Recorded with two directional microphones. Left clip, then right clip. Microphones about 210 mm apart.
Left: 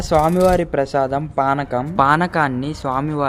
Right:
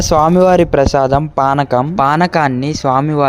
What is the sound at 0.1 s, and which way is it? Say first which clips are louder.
Speech: right 5 dB; 35° right (ahead or behind).